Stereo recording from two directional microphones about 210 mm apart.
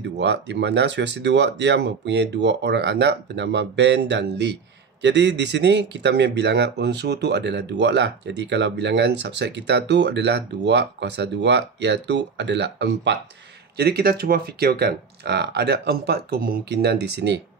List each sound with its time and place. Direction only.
0.0 s speech: 55° right (ahead or behind)